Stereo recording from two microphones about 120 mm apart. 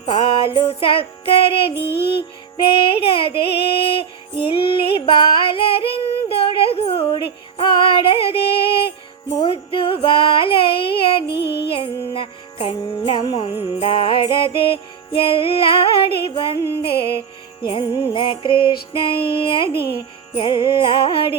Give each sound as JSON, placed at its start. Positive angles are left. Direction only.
{"t": 0.0, "sound": "music", "side_deg": 50}
{"t": 4.5, "sound": "female singing", "side_deg": 50}
{"t": 9.4, "sound": "music", "side_deg": 50}